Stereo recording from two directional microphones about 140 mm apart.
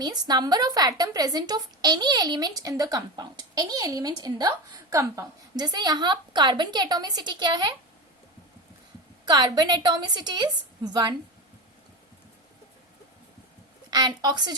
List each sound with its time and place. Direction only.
0.0 s a woman's voice: 30° right (ahead or behind)
9.2 s a woman's voice: 30° right (ahead or behind)
13.9 s a woman's voice: 30° right (ahead or behind)